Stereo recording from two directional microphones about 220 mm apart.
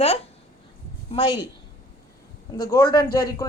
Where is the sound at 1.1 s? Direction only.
20° left (ahead or behind).